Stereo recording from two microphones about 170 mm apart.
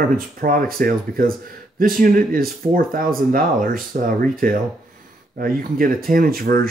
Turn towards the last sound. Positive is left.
turn(degrees=-60)  # may be behind; listen again after turning